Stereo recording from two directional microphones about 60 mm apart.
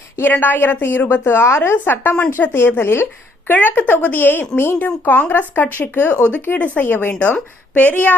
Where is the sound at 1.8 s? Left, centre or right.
Left.